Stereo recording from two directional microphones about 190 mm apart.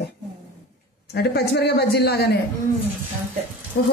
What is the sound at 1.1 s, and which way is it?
Speech, 55° left (ahead or behind).